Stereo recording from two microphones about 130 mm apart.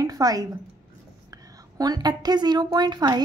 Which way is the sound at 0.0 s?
30° right (ahead or behind).